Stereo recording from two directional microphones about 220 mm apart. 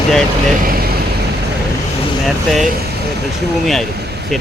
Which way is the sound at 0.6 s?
45° right (ahead or behind).